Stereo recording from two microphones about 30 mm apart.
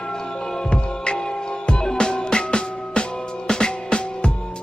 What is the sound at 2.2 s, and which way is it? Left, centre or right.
Music, left.